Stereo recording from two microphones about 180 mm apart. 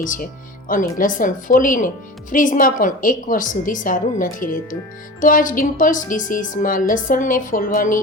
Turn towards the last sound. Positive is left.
turn(degrees=50)  # may be behind; listen again after turning